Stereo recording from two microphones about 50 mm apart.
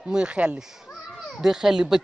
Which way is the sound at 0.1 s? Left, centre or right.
Centre.